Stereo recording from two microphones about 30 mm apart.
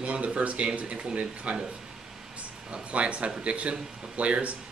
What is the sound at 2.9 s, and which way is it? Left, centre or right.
Speech, right.